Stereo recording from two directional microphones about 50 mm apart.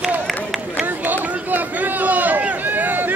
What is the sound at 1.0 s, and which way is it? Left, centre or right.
Run, right.